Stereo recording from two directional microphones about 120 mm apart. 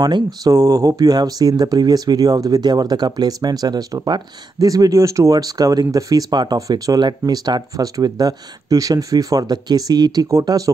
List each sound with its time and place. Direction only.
0.0 s speech: 30° right (ahead or behind)